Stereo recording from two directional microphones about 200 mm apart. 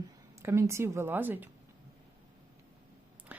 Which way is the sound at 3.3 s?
5° right (ahead or behind).